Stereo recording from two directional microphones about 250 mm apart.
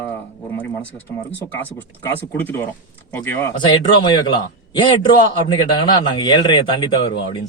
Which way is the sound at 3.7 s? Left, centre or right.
Centre.